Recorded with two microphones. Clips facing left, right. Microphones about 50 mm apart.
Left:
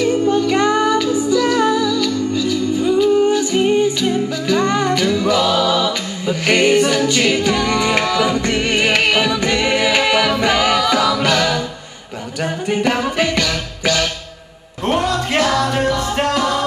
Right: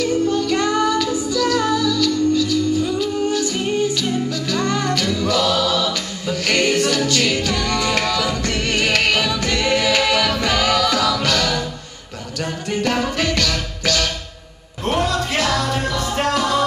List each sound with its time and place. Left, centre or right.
0.0 s music: left